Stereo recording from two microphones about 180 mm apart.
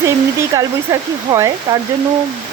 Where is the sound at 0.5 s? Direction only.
20° right (ahead or behind).